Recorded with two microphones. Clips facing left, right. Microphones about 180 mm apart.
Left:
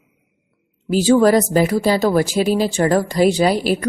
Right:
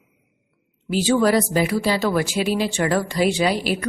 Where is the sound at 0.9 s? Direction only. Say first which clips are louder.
Left 5 dB; 45° left (ahead or behind).